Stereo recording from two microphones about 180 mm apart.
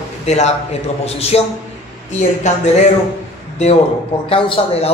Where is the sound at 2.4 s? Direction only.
40° left (ahead or behind).